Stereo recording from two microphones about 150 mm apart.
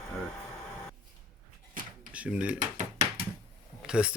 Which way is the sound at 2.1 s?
10° right (ahead or behind).